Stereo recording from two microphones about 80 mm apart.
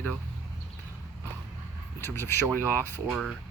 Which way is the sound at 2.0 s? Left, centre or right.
Left.